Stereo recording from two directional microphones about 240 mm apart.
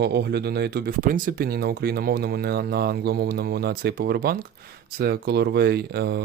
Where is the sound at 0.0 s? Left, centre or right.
Right.